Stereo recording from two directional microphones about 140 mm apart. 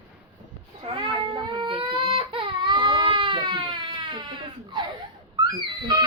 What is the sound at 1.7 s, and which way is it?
Baby cry, 40° right (ahead or behind).